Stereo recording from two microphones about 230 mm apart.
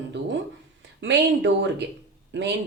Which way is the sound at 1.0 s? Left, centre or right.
Right.